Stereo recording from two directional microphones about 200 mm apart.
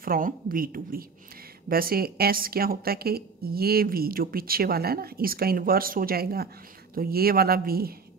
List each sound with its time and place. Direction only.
0.0 s a woman's voice: 45° right (ahead or behind)